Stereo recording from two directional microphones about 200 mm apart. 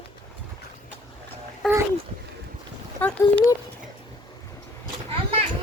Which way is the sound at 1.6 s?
Centre (ahead or behind).